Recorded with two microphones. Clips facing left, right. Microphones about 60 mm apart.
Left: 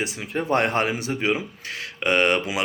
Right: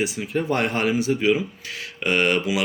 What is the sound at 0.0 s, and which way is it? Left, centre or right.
Speech, left.